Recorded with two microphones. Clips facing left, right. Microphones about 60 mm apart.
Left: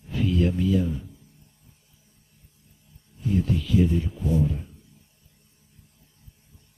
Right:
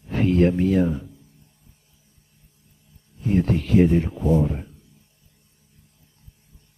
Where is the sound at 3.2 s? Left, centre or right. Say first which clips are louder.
Right 4 dB; right.